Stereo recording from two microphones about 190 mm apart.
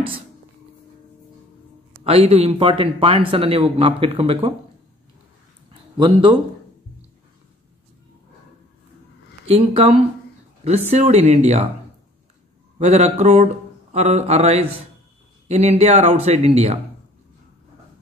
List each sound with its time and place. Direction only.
2.0 s speech: 35° right (ahead or behind)
5.9 s speech: 25° right (ahead or behind)
9.5 s speech: 30° right (ahead or behind)
12.7 s speech: 40° right (ahead or behind)